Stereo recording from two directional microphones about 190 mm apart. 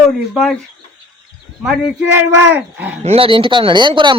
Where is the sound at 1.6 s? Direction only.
5° right (ahead or behind).